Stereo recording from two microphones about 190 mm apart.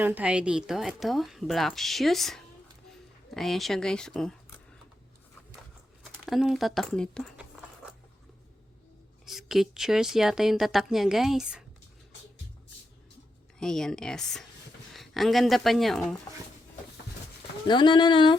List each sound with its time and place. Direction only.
0.0 s a woman's voice: 10° right (ahead or behind)
6.2 s a woman's voice: centre (ahead or behind)
9.2 s a woman's voice: centre (ahead or behind)
13.6 s a woman's voice: 5° left (ahead or behind)
17.7 s speech: 25° left (ahead or behind)